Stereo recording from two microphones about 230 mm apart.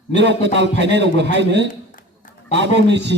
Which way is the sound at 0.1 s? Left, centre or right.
Right.